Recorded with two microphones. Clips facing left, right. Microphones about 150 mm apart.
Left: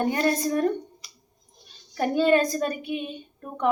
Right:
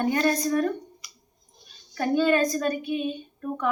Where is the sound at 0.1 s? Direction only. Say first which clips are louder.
Even; 30° left (ahead or behind).